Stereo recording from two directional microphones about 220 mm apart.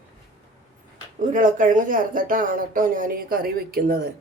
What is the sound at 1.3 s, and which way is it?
Speech, 35° right (ahead or behind).